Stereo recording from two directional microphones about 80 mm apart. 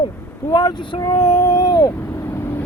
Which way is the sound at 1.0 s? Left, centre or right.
Left.